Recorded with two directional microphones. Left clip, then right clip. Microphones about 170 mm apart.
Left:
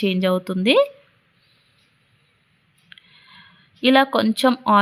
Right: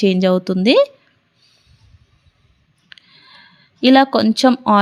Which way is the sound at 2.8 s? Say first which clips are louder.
Right 4 dB; 25° right (ahead or behind).